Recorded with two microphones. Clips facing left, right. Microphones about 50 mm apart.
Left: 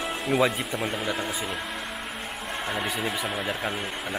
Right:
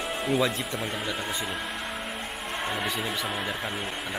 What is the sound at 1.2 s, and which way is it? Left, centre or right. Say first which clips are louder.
Speech: left 1 dB; centre.